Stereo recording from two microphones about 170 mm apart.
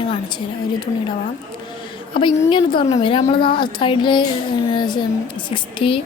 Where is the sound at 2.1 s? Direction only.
30° left (ahead or behind).